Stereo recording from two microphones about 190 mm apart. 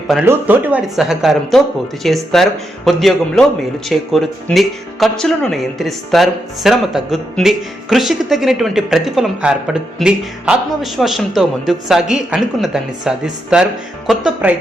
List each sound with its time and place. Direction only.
0.1 s speech: 5° right (ahead or behind)